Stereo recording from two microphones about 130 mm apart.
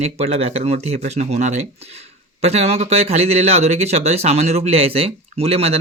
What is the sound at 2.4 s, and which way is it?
Speech, 55° right (ahead or behind).